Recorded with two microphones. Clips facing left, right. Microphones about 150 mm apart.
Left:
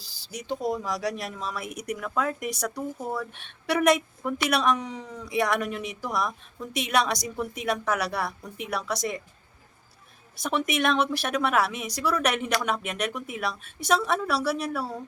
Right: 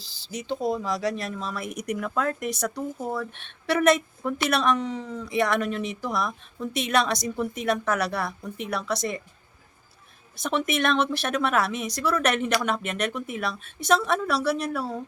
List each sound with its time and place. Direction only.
0.3 s a woman's voice: 10° left (ahead or behind)
10.3 s a woman's voice: 10° left (ahead or behind)